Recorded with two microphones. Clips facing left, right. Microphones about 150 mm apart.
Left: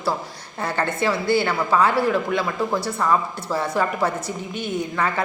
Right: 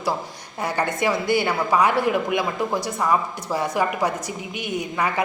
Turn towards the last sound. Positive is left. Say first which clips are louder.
# even
turn(degrees=-15)  # may be behind; listen again after turning